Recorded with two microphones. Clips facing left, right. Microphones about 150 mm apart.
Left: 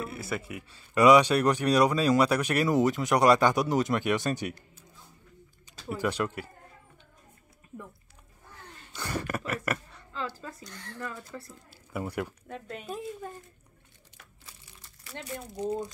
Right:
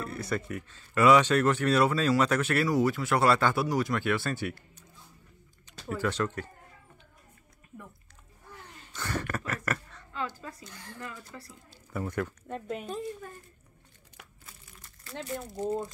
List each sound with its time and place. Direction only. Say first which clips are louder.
0.0 s speech: right 1 dB; 5° left (ahead or behind)
5.9 s speech: even; 15° left (ahead or behind)
8.9 s speech: left 1 dB; 10° left (ahead or behind)
9.5 s a sound: left 2 dB; 10° left (ahead or behind)
10.1 s a sound: even; 35° left (ahead or behind)
11.9 s speech: even; 10° left (ahead or behind)
15.0 s speech: right 3 dB; centre (ahead or behind)